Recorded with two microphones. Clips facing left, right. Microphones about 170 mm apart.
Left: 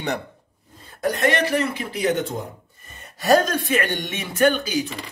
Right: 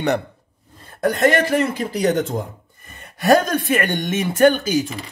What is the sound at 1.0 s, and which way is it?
Speech, 45° right (ahead or behind).